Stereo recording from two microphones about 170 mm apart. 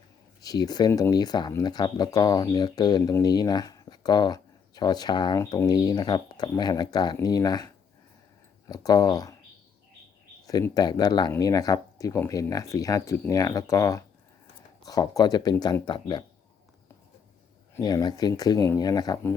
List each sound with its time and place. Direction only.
0.4 s speech: 25° left (ahead or behind)
10.4 s speech: 20° left (ahead or behind)
17.7 s speech: 20° left (ahead or behind)